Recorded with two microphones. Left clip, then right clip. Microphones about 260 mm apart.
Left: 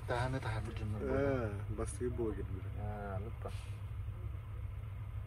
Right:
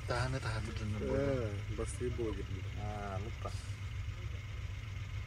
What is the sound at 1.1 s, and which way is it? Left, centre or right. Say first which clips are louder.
Speech: left 1 dB; centre.